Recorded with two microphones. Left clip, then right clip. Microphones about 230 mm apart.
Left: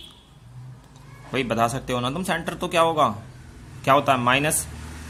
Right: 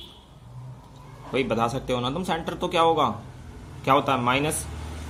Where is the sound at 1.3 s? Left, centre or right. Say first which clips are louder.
Left 2 dB; left.